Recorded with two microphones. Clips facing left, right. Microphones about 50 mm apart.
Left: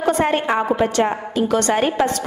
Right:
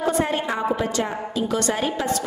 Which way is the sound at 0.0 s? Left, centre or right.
Left.